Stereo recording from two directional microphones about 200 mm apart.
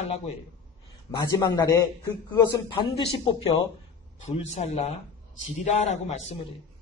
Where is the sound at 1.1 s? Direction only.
20° left (ahead or behind).